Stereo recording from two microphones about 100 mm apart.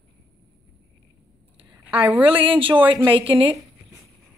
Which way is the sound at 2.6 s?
60° right (ahead or behind).